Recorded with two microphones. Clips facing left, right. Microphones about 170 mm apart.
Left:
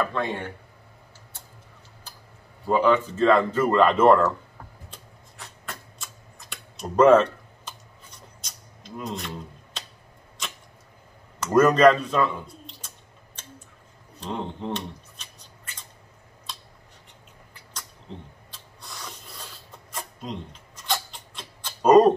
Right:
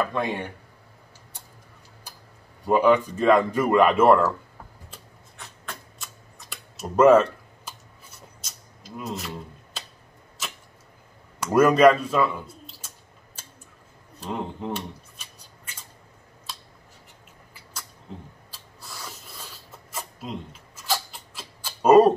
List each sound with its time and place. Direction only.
0.0 s speech: 15° right (ahead or behind)
2.6 s speech: 15° right (ahead or behind)
4.9 s a sound: centre (ahead or behind)
11.3 s speech: 10° right (ahead or behind)
14.2 s a sound: 5° right (ahead or behind)
16.5 s scissors: 5° right (ahead or behind)
18.5 s spray: 5° right (ahead or behind)